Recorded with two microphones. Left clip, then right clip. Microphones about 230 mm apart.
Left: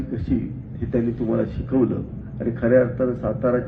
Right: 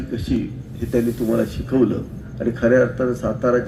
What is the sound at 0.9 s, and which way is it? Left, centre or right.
A man's voice, right.